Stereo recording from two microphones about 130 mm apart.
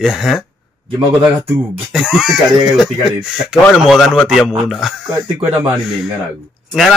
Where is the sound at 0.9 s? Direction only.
15° right (ahead or behind).